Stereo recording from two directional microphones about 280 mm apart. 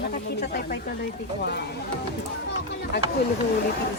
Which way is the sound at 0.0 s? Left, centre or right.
Left.